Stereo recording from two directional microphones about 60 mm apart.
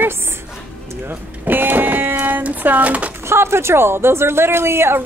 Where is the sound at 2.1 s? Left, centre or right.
Right.